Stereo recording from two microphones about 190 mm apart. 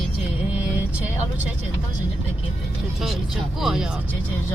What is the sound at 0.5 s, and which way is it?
Vehicle, 10° right (ahead or behind).